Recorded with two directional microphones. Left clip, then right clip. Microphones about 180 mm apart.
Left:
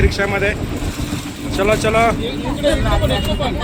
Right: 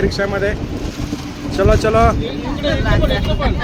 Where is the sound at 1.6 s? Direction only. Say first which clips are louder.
Right 1 dB; 40° right (ahead or behind).